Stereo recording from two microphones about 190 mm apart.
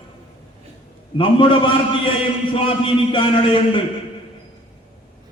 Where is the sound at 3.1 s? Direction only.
25° left (ahead or behind).